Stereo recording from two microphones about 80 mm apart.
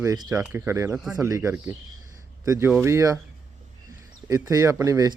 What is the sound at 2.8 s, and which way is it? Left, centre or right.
Speech, right.